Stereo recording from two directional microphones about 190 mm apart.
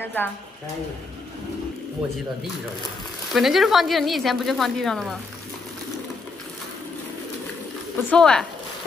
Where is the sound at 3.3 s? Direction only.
Centre (ahead or behind).